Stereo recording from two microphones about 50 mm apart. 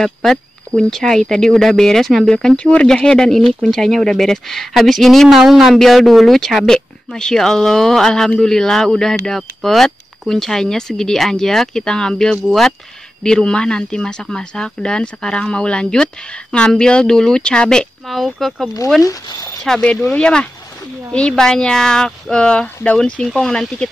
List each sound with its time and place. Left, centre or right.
0.0 s speech: centre
2.5 s speech: left; by 5.3 s centre
5.3 s speech: centre
18.0 s speech: centre; by 23.2 s left
23.2 s speech: centre